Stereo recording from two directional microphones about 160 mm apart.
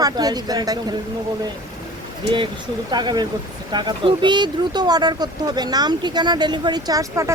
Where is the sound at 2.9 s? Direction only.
25° right (ahead or behind).